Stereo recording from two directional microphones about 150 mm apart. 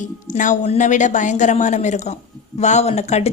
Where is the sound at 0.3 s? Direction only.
60° left (ahead or behind).